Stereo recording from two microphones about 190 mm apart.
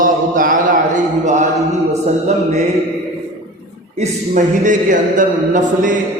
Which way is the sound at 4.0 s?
40° right (ahead or behind).